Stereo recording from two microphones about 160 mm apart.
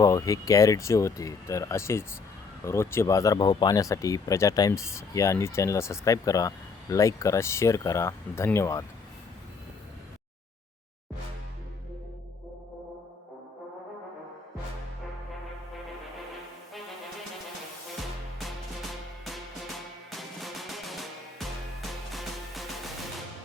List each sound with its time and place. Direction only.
0.0 s speech: 20° left (ahead or behind)
18.3 s music: centre (ahead or behind)